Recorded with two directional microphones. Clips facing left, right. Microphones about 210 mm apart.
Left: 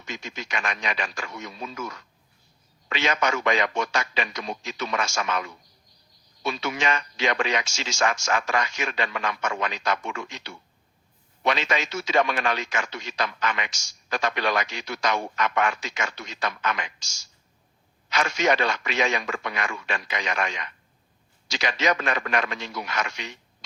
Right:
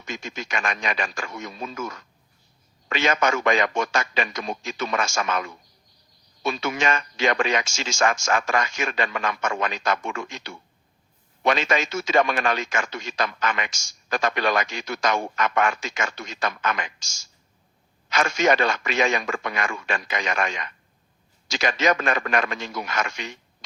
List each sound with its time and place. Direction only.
0.0 s speech: 50° right (ahead or behind)